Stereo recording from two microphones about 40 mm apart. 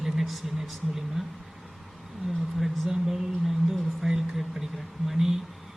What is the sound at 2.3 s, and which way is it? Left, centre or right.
Speech, centre.